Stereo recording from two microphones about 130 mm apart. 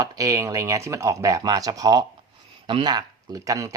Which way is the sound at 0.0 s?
25° right (ahead or behind).